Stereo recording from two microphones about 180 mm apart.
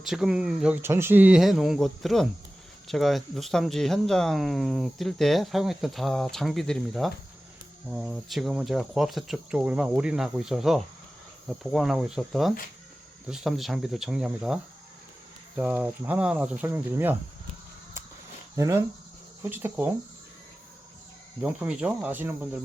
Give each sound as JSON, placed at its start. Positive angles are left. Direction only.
{"t": 0.0, "sound": "speech", "side_deg": -5}
{"t": 15.5, "sound": "cricket", "side_deg": -10}
{"t": 18.5, "sound": "speech", "side_deg": -15}
{"t": 19.4, "sound": "cricket", "side_deg": -10}
{"t": 21.4, "sound": "cricket", "side_deg": -5}